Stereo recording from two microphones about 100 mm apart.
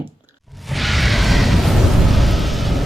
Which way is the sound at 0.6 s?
Centre (ahead or behind).